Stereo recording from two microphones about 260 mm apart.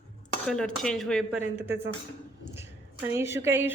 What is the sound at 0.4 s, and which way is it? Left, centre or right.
Speech, centre.